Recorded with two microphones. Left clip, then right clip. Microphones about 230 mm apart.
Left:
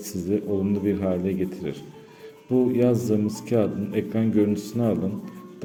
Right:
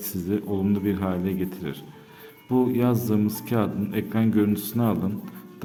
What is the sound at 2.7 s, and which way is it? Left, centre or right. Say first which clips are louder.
Speech: left 2 dB; centre.